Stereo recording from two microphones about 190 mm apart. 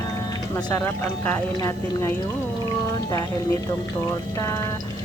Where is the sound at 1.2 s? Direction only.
15° left (ahead or behind).